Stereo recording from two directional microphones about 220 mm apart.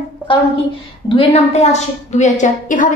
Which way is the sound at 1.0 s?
25° left (ahead or behind).